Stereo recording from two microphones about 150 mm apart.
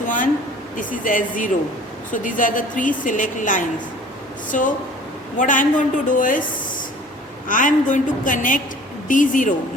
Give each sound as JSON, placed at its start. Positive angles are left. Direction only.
{"t": 0.0, "sound": "a sound", "side_deg": 60}
{"t": 0.8, "sound": "a woman's voice", "side_deg": 60}
{"t": 7.4, "sound": "a woman's voice", "side_deg": 60}